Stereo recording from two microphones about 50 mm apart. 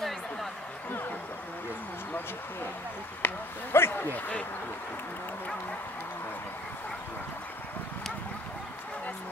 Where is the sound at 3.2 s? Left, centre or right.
Left.